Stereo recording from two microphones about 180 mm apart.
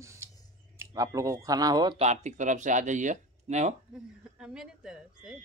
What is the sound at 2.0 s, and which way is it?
Speech, 40° right (ahead or behind).